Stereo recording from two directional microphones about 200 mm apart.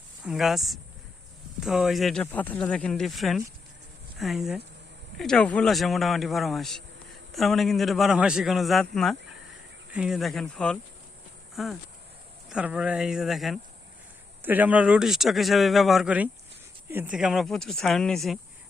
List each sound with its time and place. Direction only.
0.3 s a man's voice: centre (ahead or behind)